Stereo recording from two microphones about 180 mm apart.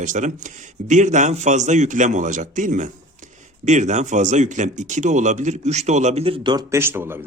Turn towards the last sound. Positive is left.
turn(degrees=-15)  # may be behind; listen again after turning